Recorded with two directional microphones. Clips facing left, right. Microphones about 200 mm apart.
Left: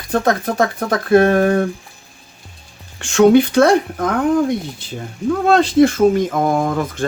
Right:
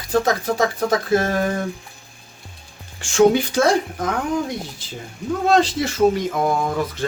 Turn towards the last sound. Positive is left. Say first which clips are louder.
# left 3 dB
turn(degrees=50)  # may be behind; listen again after turning